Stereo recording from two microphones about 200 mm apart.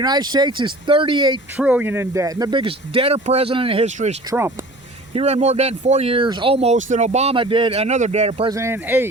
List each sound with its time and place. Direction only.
0.0 s speech: 20° right (ahead or behind)
1.5 s speech: 10° right (ahead or behind); by 4.2 s 35° right (ahead or behind)
4.3 s speech: 15° right (ahead or behind)
5.1 s speech: 35° right (ahead or behind)
8.4 s speech: 15° right (ahead or behind)